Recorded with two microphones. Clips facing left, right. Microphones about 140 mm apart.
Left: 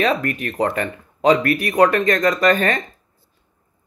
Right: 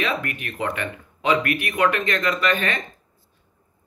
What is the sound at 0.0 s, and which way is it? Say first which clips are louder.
Speech: left 6 dB; 40° left (ahead or behind).